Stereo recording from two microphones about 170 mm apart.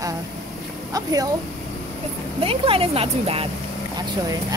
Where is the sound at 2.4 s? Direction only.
35° right (ahead or behind).